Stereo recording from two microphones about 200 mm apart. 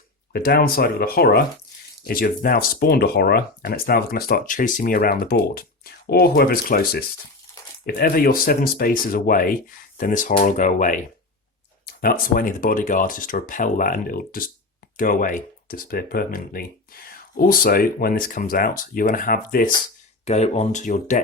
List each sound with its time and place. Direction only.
0.3 s speech: 50° left (ahead or behind)
20.2 s speech: 35° left (ahead or behind)